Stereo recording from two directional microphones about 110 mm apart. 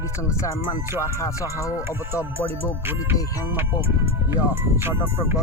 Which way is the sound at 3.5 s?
20° right (ahead or behind).